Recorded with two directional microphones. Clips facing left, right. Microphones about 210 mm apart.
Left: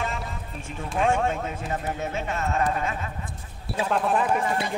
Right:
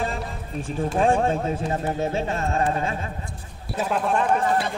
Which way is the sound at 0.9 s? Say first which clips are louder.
Right 3 dB; 35° right (ahead or behind).